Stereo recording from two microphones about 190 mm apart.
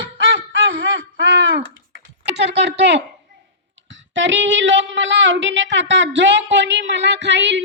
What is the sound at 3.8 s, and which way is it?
Speech, 75° right (ahead or behind).